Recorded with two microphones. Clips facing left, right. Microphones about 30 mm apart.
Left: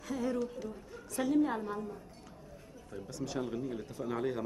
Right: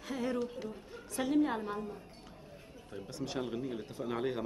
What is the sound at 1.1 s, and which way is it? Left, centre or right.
A woman's voice, right.